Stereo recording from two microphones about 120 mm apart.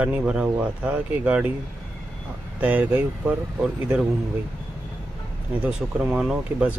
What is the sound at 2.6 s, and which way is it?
Speech, 15° right (ahead or behind).